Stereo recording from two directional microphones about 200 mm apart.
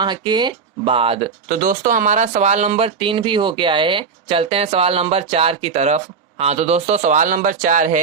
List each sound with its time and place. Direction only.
0.0 s speech: 20° right (ahead or behind)
1.6 s speech: 40° right (ahead or behind)